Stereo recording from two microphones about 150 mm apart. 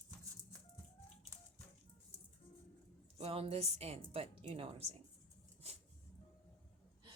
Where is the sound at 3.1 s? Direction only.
40° right (ahead or behind).